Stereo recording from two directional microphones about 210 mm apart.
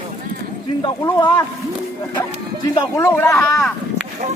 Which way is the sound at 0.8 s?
20° left (ahead or behind).